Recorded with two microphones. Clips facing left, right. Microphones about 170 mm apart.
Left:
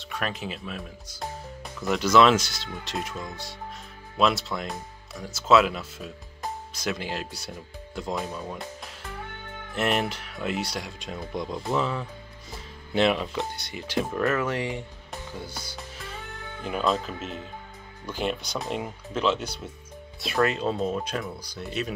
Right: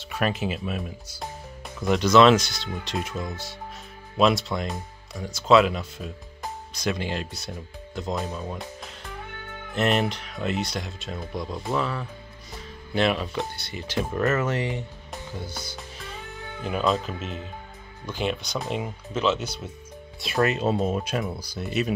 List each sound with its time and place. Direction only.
0.1 s speech: 5° right (ahead or behind)
1.9 s speech: 10° left (ahead or behind)
8.3 s speech: 15° right (ahead or behind)
9.8 s speech: 5° left (ahead or behind)
11.5 s speech: centre (ahead or behind)
12.9 s speech: 20° left (ahead or behind)
14.1 s speech: 5° right (ahead or behind)
14.4 s speech: 10° left (ahead or behind)
16.7 s speech: centre (ahead or behind)
18.0 s speech: 5° left (ahead or behind)